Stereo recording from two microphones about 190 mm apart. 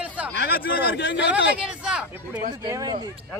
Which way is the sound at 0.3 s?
60° left (ahead or behind).